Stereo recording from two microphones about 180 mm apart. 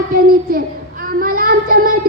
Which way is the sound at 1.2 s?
50° right (ahead or behind).